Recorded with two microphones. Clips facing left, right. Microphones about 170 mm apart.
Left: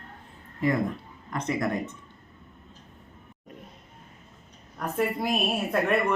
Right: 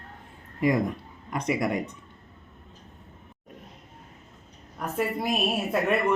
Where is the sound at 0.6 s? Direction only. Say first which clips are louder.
Right 2 dB; 15° right (ahead or behind).